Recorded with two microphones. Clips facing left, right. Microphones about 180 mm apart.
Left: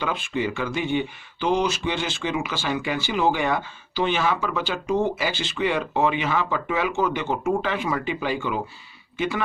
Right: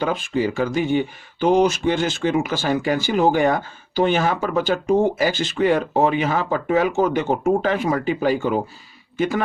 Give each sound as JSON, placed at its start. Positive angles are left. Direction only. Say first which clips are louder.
{"t": 0.0, "sound": "speech", "louder": "right 5 dB", "side_deg": -40}